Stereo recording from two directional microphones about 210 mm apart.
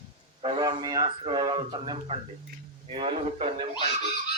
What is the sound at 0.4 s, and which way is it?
Speech, 20° right (ahead or behind).